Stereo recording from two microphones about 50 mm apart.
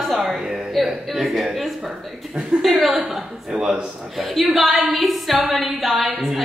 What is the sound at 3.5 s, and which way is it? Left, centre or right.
Speech, centre.